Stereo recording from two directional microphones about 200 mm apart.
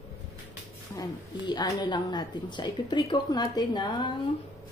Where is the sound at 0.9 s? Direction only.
20° left (ahead or behind).